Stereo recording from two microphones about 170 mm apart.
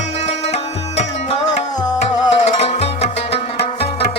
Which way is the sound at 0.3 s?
40° left (ahead or behind).